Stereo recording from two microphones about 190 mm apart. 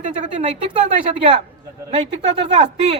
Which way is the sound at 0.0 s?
35° right (ahead or behind).